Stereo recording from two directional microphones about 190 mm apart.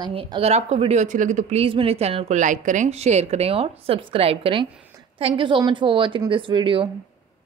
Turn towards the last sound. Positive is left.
turn(degrees=-25)  # may be behind; listen again after turning